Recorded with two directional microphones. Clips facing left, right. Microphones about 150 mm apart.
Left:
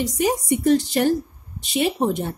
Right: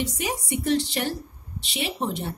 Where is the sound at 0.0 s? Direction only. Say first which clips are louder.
Left 7 dB; 40° left (ahead or behind).